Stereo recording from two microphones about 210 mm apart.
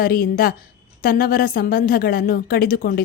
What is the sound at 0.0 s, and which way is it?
A woman's voice, 45° left (ahead or behind).